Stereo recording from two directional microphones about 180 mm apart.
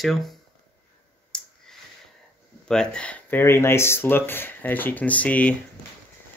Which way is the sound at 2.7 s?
5° left (ahead or behind).